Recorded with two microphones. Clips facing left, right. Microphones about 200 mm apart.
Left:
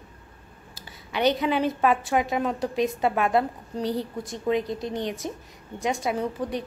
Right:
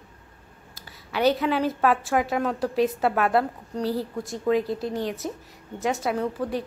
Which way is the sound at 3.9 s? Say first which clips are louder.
Right 1 dB; 5° right (ahead or behind).